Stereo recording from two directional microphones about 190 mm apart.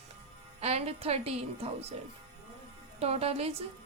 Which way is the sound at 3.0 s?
30° right (ahead or behind).